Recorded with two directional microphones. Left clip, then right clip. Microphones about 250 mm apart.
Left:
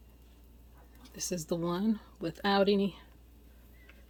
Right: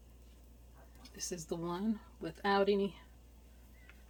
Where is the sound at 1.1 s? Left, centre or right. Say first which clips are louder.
Left 6 dB; left.